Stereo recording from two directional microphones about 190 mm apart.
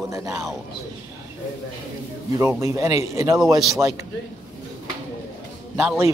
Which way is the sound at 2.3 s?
15° right (ahead or behind).